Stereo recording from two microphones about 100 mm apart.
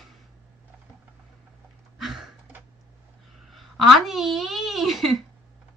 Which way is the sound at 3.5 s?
Centre (ahead or behind).